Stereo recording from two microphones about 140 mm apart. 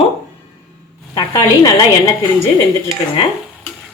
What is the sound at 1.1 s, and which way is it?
Speech, 30° left (ahead or behind).